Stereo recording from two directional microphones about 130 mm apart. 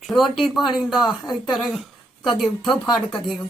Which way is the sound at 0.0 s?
Centre (ahead or behind).